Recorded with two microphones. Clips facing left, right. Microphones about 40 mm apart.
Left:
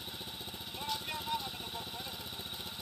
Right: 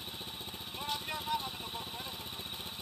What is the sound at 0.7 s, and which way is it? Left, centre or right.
Vehicle, right.